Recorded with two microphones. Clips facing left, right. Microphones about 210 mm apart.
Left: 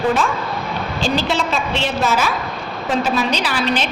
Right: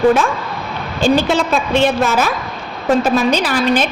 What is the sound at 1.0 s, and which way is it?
A woman's voice, 50° right (ahead or behind).